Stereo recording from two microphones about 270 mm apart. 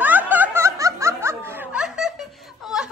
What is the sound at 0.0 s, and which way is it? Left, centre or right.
Snicker, centre.